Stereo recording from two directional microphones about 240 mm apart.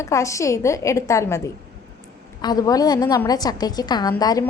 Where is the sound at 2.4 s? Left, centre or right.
Centre.